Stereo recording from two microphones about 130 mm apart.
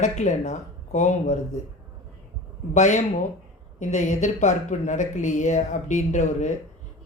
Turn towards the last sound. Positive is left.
turn(degrees=65)  # may be behind; listen again after turning